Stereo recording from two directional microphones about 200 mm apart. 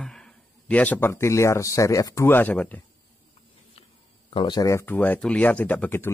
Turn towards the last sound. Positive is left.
turn(degrees=10)  # may be behind; listen again after turning